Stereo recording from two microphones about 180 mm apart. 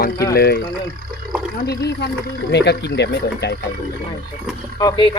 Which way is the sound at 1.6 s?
65° left (ahead or behind).